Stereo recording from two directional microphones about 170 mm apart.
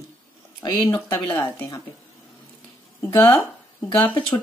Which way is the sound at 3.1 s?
15° left (ahead or behind).